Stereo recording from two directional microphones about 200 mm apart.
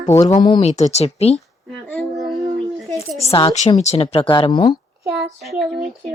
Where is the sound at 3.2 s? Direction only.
30° left (ahead or behind).